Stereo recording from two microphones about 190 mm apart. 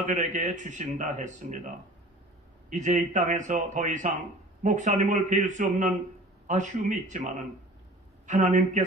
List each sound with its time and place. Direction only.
0.0 s speech: 40° right (ahead or behind)
2.7 s speech: 40° right (ahead or behind)